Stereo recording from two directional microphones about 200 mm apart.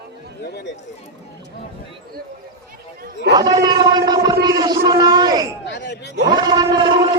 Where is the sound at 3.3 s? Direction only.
20° right (ahead or behind).